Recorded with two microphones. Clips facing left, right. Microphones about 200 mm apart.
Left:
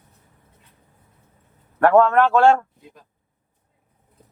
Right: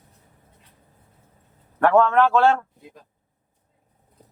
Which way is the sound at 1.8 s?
5° left (ahead or behind).